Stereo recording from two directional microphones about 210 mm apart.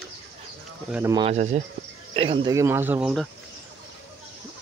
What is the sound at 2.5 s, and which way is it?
Speech, 15° right (ahead or behind).